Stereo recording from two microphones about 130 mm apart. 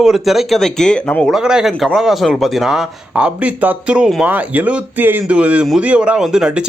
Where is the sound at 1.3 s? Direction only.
5° right (ahead or behind).